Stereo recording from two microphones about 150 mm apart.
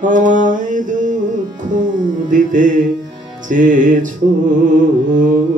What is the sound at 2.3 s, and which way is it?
Mantra, 60° right (ahead or behind).